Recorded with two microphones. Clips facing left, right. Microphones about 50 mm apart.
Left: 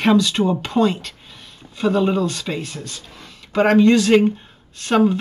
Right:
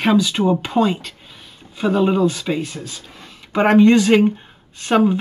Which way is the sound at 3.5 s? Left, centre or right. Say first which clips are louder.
Right 1 dB; centre.